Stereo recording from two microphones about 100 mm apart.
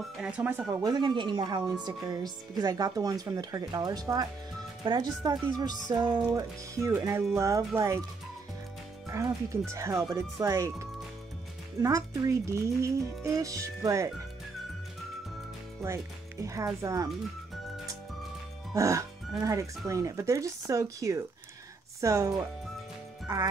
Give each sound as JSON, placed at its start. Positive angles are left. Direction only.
{"t": 0.0, "sound": "speech", "side_deg": -10}
{"t": 0.5, "sound": "speech", "side_deg": -20}
{"t": 0.8, "sound": "speech", "side_deg": -45}
{"t": 6.3, "sound": "speech", "side_deg": -30}
{"t": 9.1, "sound": "speech", "side_deg": -30}
{"t": 15.8, "sound": "speech", "side_deg": -30}
{"t": 18.7, "sound": "speech", "side_deg": -30}